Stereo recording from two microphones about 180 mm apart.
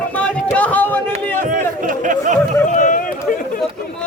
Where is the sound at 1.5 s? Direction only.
45° right (ahead or behind).